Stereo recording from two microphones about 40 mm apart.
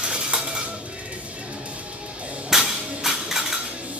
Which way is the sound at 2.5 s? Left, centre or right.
Centre.